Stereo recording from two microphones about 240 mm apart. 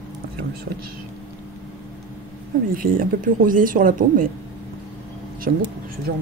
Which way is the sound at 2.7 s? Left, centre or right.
Right.